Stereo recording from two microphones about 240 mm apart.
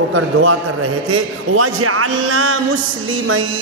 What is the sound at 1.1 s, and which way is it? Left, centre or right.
Speech, right.